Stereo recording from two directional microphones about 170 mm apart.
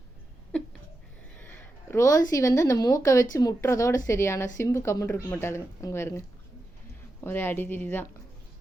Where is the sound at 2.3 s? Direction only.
20° left (ahead or behind).